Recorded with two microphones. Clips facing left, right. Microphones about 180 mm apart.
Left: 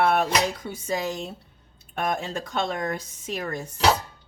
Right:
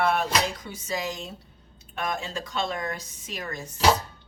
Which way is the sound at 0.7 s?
55° left (ahead or behind).